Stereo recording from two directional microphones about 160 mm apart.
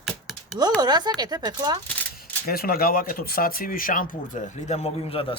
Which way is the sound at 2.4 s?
70° left (ahead or behind).